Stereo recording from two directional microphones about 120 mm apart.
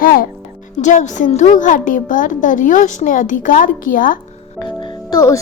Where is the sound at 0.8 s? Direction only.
90° left.